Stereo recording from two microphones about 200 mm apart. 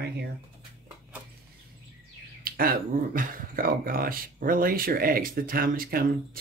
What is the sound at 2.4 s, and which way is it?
Speech, 45° right (ahead or behind).